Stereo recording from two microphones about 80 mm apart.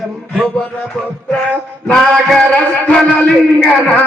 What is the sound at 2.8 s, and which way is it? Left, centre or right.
Music, centre.